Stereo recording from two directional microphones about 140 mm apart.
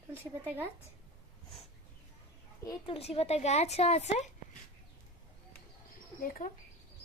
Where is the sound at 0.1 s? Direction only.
15° right (ahead or behind).